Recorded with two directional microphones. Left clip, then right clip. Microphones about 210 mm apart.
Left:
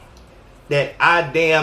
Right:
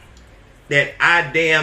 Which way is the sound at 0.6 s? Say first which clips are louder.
Right 1 dB; 15° left (ahead or behind).